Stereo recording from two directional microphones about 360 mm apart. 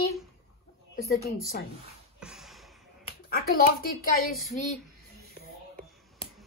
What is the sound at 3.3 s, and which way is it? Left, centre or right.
Speech, left.